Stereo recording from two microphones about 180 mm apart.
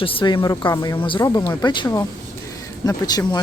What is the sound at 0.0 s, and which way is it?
Speech, 30° left (ahead or behind).